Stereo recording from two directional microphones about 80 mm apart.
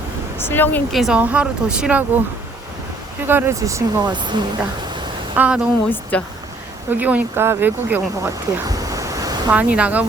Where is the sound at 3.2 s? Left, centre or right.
Right.